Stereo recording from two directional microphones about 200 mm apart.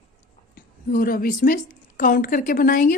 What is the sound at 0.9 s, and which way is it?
A woman's voice, 45° left (ahead or behind).